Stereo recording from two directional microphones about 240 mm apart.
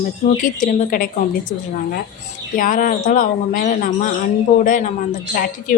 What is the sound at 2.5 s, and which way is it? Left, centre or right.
A woman's voice, left.